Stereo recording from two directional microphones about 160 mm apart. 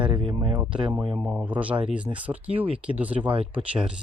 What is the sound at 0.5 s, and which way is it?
Speech, 10° right (ahead or behind).